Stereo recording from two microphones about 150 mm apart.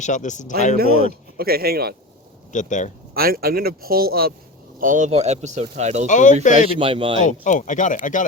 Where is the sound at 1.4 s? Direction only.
90° right.